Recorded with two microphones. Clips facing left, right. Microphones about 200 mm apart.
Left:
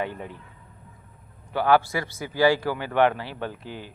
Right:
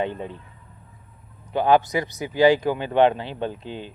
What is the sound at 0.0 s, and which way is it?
Speech, 20° right (ahead or behind).